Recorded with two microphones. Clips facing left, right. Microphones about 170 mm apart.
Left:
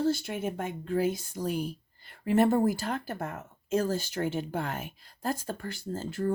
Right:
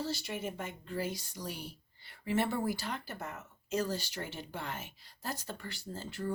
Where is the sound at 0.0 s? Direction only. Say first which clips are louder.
Left 8 dB; 50° left (ahead or behind).